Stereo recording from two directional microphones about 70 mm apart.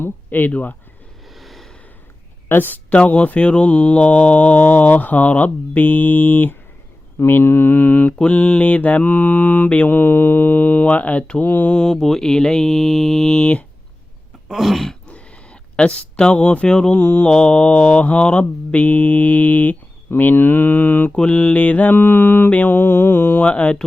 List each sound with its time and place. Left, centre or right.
0.0 s speech: left
1.4 s a sound: centre
2.5 s speech: left
7.2 s mantra: left
8.2 s speech: left
11.8 s mantra: centre
14.4 s throat clearing: centre
15.0 s a sound: centre
17.0 s speech: left
17.2 s speech: centre
23.5 s mantra: centre